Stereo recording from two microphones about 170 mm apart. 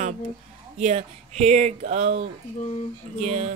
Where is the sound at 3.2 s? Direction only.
40° right (ahead or behind).